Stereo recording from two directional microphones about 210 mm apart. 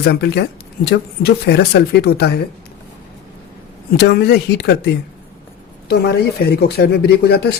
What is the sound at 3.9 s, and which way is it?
Speech, 50° left (ahead or behind).